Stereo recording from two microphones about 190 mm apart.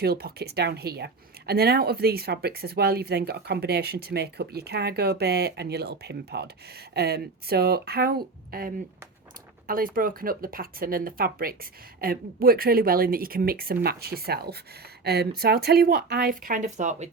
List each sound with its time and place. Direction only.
0.0 s speech: 55° right (ahead or behind); by 17.1 s 40° right (ahead or behind)